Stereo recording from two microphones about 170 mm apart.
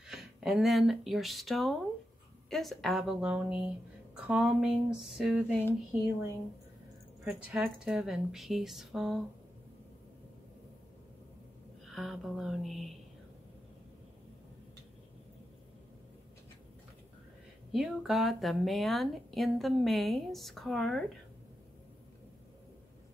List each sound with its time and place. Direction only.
0.0 s a woman's voice: 5° right (ahead or behind)
7.2 s a woman's voice: 5° right (ahead or behind)
11.8 s a woman's voice: centre (ahead or behind)
17.7 s a woman's voice: centre (ahead or behind)